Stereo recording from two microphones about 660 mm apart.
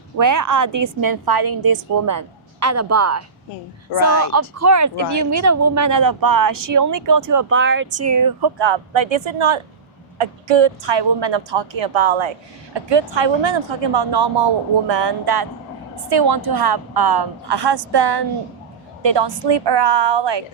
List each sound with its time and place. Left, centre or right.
0.2 s a woman's voice: right
3.9 s speech: left
4.3 s a woman's voice: right
7.5 s a woman's voice: centre; by 20.4 s right